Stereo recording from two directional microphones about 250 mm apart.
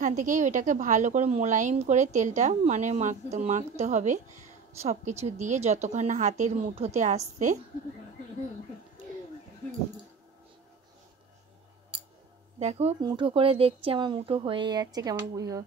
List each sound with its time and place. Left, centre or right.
0.2 s a woman's voice: right
5.2 s a woman's voice: right
12.5 s a woman's voice: right